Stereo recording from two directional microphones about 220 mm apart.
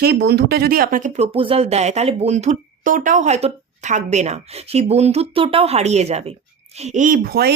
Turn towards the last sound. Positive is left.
turn(degrees=-45)  # may be behind; listen again after turning